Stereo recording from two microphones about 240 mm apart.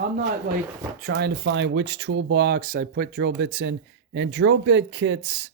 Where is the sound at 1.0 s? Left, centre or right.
Right.